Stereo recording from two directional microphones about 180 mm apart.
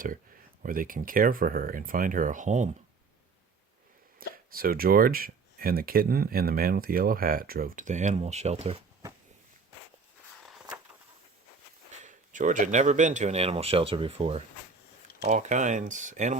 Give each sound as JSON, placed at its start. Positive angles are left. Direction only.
{"t": 0.6, "sound": "speech", "side_deg": -50}
{"t": 4.2, "sound": "speech", "side_deg": -55}
{"t": 12.0, "sound": "speech", "side_deg": -45}